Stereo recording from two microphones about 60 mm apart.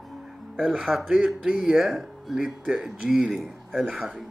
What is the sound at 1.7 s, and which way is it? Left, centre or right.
Speech, centre.